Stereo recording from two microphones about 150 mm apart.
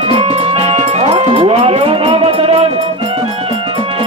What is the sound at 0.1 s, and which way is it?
Music, 40° right (ahead or behind).